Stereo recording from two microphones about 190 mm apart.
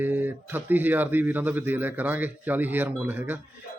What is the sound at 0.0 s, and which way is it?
Speech, 10° right (ahead or behind).